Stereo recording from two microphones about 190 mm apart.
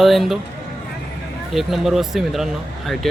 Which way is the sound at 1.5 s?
Centre (ahead or behind).